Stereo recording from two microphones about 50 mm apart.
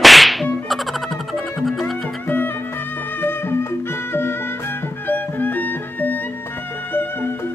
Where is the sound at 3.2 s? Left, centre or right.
Left.